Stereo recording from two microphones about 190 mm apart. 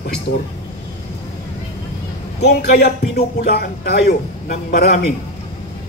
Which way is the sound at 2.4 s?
60° left (ahead or behind).